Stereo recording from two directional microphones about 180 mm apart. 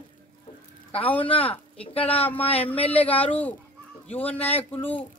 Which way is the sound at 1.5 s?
30° left (ahead or behind).